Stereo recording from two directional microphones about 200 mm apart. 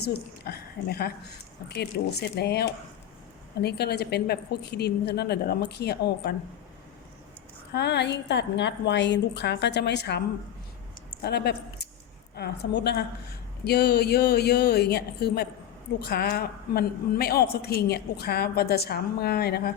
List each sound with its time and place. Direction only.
0.1 s a woman's voice: 50° left (ahead or behind)
7.7 s a woman's voice: 55° left (ahead or behind)
11.2 s a woman's voice: 55° left (ahead or behind)